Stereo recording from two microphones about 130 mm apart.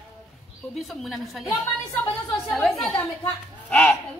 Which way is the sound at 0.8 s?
Centre (ahead or behind).